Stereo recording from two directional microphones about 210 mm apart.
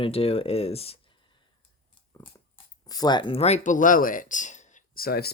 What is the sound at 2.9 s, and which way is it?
Speech, 20° left (ahead or behind).